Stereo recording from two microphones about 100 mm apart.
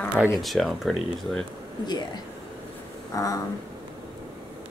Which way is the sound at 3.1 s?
35° left (ahead or behind).